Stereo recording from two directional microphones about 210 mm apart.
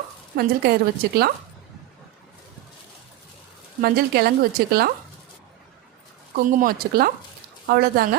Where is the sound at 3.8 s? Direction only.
50° right (ahead or behind).